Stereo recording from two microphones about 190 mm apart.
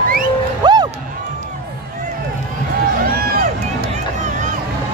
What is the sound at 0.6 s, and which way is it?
Music, 20° right (ahead or behind).